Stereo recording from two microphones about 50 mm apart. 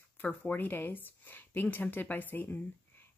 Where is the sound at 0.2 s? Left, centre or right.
Left.